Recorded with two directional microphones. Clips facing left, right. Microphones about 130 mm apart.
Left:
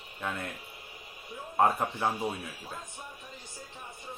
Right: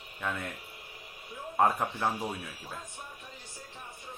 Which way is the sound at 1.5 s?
5° left (ahead or behind).